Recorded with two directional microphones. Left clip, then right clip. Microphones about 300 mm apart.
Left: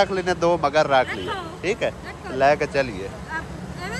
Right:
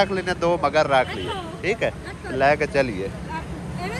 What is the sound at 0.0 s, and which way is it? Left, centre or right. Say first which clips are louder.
Speech: left 1 dB; centre.